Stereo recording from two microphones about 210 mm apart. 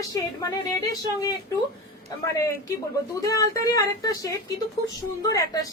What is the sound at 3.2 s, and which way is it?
A woman's voice, 15° left (ahead or behind).